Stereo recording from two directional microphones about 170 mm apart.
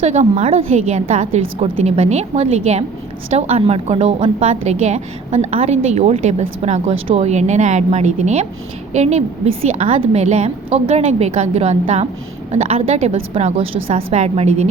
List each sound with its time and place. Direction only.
0.0 s a woman's voice: 40° right (ahead or behind)